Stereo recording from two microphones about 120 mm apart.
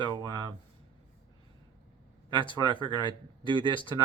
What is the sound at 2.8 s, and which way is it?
Speech, 40° right (ahead or behind).